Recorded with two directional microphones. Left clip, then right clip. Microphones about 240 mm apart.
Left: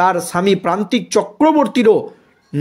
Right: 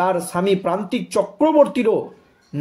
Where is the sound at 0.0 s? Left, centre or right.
Left.